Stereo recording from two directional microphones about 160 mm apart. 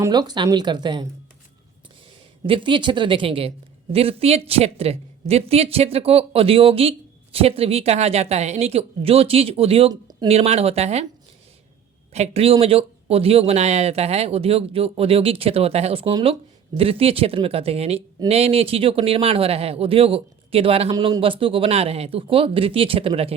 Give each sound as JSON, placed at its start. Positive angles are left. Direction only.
{"t": 0.0, "sound": "speech", "side_deg": -25}
{"t": 2.4, "sound": "speech", "side_deg": -30}
{"t": 9.9, "sound": "a sound", "side_deg": -25}
{"t": 10.2, "sound": "speech", "side_deg": -40}
{"t": 12.1, "sound": "speech", "side_deg": -40}